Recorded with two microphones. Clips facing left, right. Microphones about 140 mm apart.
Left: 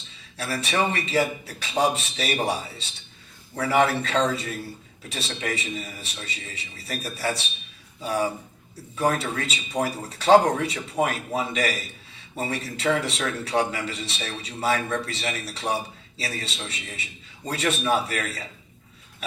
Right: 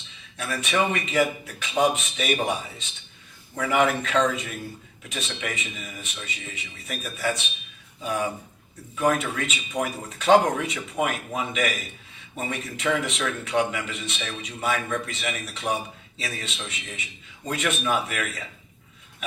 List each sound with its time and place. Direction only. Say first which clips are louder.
0.3 s a man's voice: even; 35° left (ahead or behind)